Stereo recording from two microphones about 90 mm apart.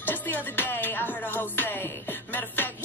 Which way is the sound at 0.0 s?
20° left (ahead or behind).